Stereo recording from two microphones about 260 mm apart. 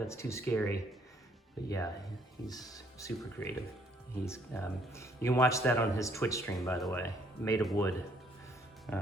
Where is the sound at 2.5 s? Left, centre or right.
Centre.